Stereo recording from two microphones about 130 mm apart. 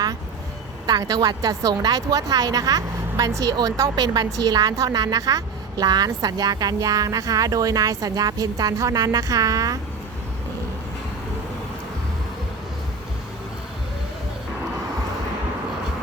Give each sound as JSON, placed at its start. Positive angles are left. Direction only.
{"t": 0.9, "sound": "speech", "side_deg": -30}